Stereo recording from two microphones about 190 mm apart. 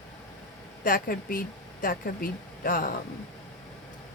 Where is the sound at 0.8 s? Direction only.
50° left (ahead or behind).